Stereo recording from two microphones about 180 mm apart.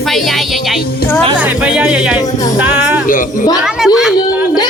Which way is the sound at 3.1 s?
50° left (ahead or behind).